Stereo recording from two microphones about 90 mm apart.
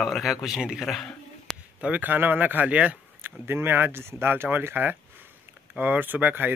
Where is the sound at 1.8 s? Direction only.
15° right (ahead or behind).